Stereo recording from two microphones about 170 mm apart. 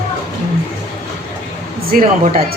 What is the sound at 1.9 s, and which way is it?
Speech, 55° right (ahead or behind).